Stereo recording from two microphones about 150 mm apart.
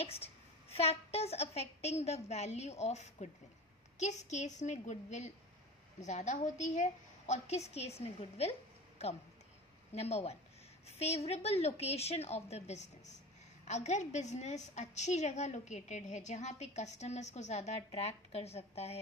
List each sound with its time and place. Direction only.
0.2 s a woman's voice: 40° left (ahead or behind)